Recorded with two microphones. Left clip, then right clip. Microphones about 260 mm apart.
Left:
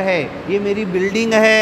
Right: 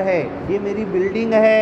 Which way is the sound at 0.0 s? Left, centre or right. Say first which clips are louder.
Left 1 dB; left.